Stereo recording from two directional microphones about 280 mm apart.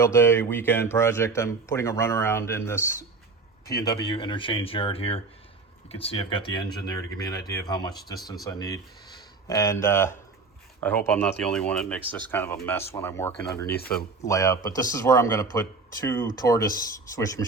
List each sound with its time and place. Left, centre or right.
0.0 s speech: centre
7.9 s speech: centre
13.7 s speech: left
14.3 s speech: centre